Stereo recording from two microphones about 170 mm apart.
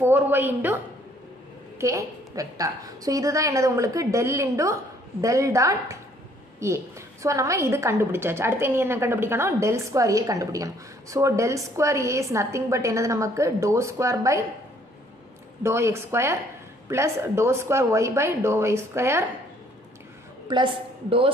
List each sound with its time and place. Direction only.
0.0 s a woman's voice: 10° right (ahead or behind)
1.8 s a woman's voice: 20° right (ahead or behind)
15.6 s a woman's voice: 15° right (ahead or behind)
20.4 s a woman's voice: 30° right (ahead or behind)